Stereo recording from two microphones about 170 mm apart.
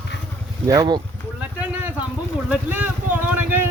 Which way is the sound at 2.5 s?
10° right (ahead or behind).